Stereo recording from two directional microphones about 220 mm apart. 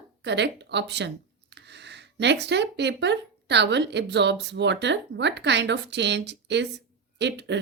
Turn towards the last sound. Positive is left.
turn(degrees=-50)  # may be behind; listen again after turning